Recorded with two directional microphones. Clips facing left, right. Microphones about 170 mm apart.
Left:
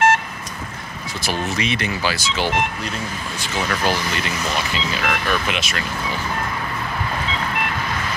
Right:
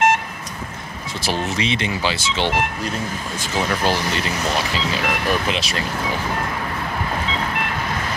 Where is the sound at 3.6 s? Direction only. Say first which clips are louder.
Right 1 dB; 25° right (ahead or behind).